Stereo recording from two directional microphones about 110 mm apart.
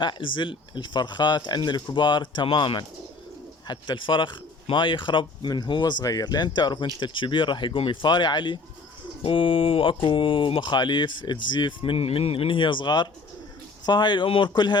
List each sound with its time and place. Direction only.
0.0 s speech: 45° left (ahead or behind)
9.2 s speech: 55° left (ahead or behind)